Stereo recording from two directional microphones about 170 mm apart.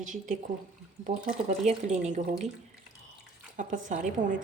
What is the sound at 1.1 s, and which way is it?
A woman's voice, 45° right (ahead or behind).